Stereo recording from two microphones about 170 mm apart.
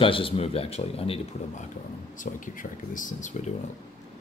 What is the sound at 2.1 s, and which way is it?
Speech, 50° left (ahead or behind).